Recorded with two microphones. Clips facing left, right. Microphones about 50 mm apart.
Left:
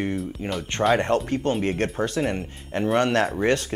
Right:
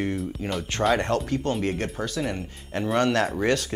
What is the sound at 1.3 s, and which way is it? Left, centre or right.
Speech, left.